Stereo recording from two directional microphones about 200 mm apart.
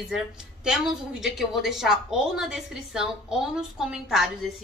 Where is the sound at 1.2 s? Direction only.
Centre (ahead or behind).